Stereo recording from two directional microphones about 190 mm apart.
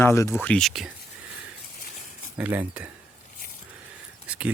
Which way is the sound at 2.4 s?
10° right (ahead or behind).